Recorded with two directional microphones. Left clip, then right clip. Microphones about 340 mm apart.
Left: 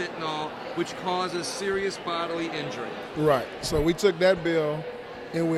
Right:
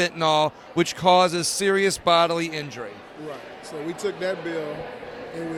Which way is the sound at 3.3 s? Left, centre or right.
Left.